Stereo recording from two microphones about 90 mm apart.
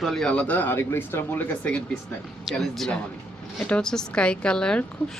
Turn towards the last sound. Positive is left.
turn(degrees=10)  # may be behind; listen again after turning